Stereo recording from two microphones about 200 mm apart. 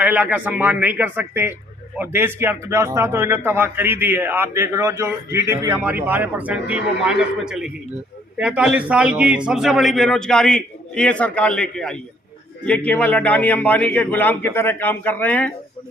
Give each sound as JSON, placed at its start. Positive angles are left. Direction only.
{"t": 0.0, "sound": "a man's voice", "side_deg": -10}